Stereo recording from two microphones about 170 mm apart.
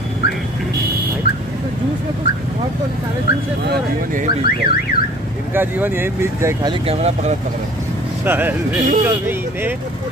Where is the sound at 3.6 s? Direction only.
70° right (ahead or behind).